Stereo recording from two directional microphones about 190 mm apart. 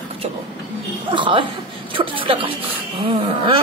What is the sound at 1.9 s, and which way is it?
A woman's voice, 25° right (ahead or behind).